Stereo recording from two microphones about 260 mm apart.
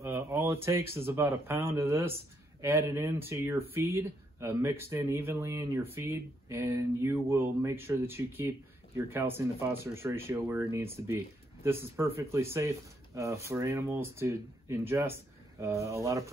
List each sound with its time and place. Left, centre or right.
0.0 s speech: centre